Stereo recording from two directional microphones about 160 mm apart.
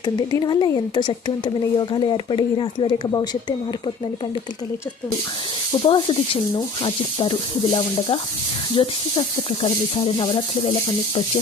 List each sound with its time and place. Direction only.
0.0 s speech: 25° left (ahead or behind)
5.8 s speech: 35° left (ahead or behind)
8.7 s speech: 35° left (ahead or behind)